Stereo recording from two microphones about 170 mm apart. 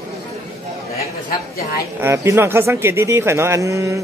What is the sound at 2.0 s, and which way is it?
Speech, 15° right (ahead or behind).